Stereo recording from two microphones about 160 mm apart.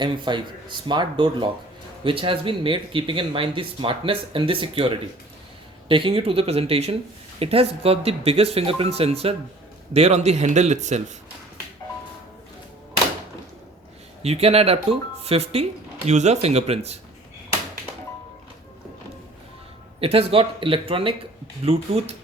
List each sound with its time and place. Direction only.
0.0 s a man's voice: 30° right (ahead or behind); by 11.0 s 45° right (ahead or behind)
14.2 s speech: 40° right (ahead or behind)
20.0 s speech: 35° right (ahead or behind)